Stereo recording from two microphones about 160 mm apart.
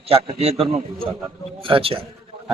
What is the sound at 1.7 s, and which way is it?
Speech, 35° right (ahead or behind).